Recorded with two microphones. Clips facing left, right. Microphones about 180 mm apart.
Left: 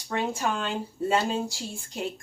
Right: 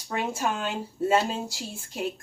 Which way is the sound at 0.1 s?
5° right (ahead or behind).